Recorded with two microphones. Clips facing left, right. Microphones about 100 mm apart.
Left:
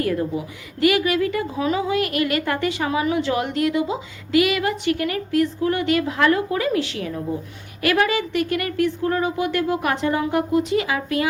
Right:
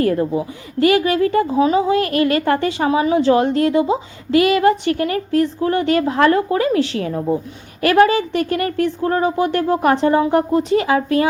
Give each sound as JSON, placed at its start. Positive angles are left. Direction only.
{"t": 0.0, "sound": "a woman's voice", "side_deg": -35}